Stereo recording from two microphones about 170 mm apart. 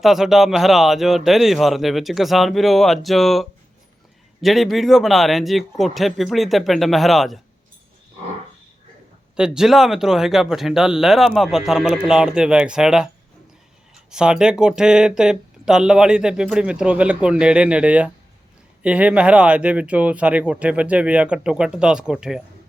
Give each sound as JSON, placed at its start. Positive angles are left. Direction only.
{"t": 0.0, "sound": "speech", "side_deg": 0}
{"t": 9.3, "sound": "speech", "side_deg": -5}
{"t": 14.1, "sound": "speech", "side_deg": -5}